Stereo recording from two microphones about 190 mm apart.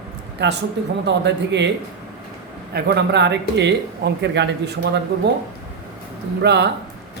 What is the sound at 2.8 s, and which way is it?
A man's voice, 60° right (ahead or behind).